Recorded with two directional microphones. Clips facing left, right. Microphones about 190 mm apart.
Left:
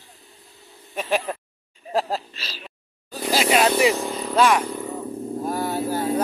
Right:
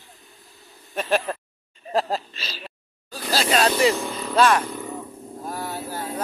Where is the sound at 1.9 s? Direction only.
5° left (ahead or behind).